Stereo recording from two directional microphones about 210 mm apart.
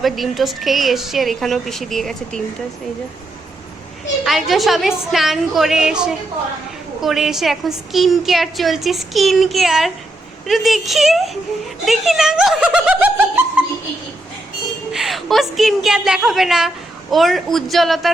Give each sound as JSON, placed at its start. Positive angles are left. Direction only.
{"t": 0.0, "sound": "a woman's voice", "side_deg": 0}
{"t": 4.2, "sound": "a woman's voice", "side_deg": 0}
{"t": 14.9, "sound": "a woman's voice", "side_deg": 0}